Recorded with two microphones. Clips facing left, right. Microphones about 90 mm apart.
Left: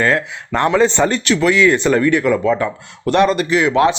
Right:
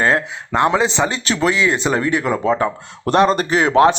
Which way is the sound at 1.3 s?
25° right (ahead or behind).